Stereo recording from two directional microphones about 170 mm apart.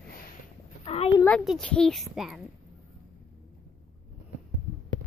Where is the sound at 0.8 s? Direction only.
35° left (ahead or behind).